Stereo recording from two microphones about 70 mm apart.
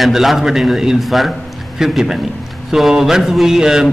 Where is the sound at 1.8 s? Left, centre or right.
Centre.